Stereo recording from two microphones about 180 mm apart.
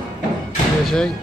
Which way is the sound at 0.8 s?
5° left (ahead or behind).